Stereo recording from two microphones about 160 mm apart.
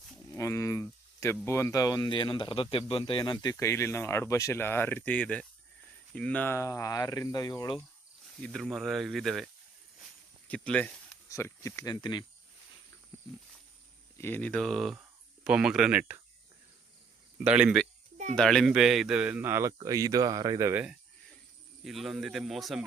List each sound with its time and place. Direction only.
0.3 s a sound: 20° left (ahead or behind)
1.5 s speech: 15° left (ahead or behind)
8.4 s speech: 5° left (ahead or behind)
10.5 s speech: 10° left (ahead or behind)
11.3 s speech: 15° left (ahead or behind)
14.2 s a man's voice: 10° left (ahead or behind); by 16.2 s 10° right (ahead or behind)
17.3 s a man's voice: 5° right (ahead or behind)
21.8 s speech: centre (ahead or behind)